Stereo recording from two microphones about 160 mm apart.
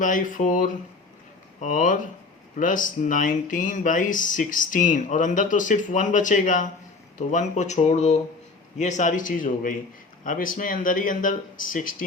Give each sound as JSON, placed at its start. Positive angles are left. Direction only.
{"t": 0.0, "sound": "speech", "side_deg": 55}